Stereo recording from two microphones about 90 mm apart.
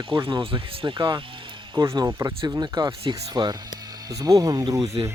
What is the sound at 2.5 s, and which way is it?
Speech, 50° right (ahead or behind).